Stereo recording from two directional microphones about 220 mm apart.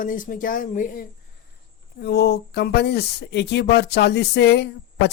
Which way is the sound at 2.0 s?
50° left (ahead or behind).